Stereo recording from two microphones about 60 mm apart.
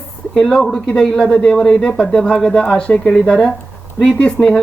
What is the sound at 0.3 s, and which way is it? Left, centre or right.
Speech, centre.